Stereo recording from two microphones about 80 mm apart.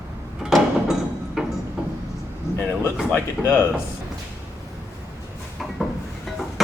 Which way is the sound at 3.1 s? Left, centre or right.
Left.